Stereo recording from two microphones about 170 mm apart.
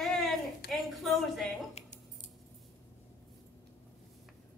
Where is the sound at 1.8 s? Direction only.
40° left (ahead or behind).